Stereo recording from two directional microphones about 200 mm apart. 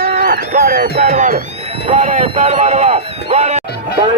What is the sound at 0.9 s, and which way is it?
Speech, 40° right (ahead or behind).